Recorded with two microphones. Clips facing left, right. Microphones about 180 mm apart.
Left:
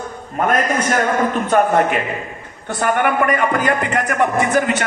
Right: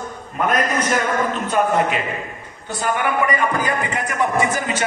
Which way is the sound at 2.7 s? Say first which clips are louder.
Left 4 dB; 60° left (ahead or behind).